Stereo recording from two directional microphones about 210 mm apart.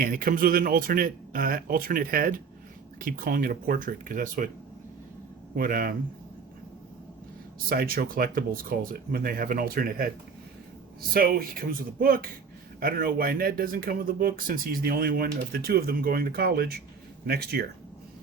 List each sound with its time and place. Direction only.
0.0 s speech: 40° right (ahead or behind)
5.5 s speech: 45° right (ahead or behind)
7.7 s speech: 45° right (ahead or behind)
11.1 s speech: 45° right (ahead or behind)